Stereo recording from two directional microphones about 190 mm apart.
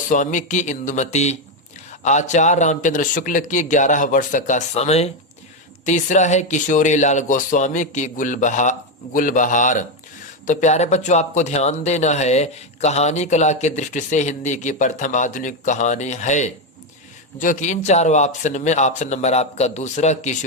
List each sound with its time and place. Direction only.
0.1 s a man's voice: 40° left (ahead or behind)